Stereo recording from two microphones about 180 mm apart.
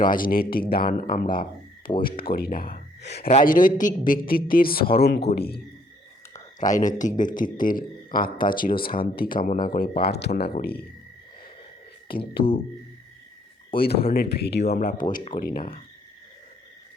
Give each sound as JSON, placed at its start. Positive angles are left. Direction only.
{"t": 0.0, "sound": "a man's voice", "side_deg": 50}
{"t": 3.2, "sound": "a man's voice", "side_deg": 45}
{"t": 6.7, "sound": "a man's voice", "side_deg": 45}
{"t": 12.0, "sound": "a man's voice", "side_deg": 55}
{"t": 13.7, "sound": "a man's voice", "side_deg": 60}
{"t": 14.7, "sound": "a man's voice", "side_deg": 55}